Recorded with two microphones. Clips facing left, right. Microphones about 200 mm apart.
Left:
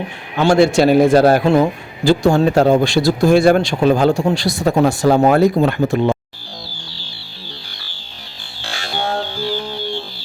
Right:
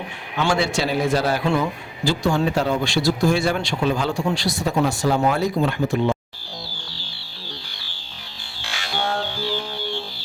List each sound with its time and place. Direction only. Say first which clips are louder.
0.3 s speech: left 9 dB; 45° left (ahead or behind)
8.6 s music: left 3 dB; 35° left (ahead or behind)